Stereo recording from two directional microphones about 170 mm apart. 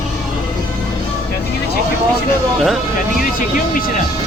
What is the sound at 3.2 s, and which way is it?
Speech, 55° left (ahead or behind).